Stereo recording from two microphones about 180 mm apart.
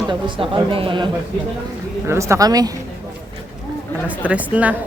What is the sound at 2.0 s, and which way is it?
Speech, 15° right (ahead or behind).